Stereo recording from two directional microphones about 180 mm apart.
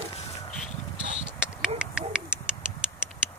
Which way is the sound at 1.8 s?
5° right (ahead or behind).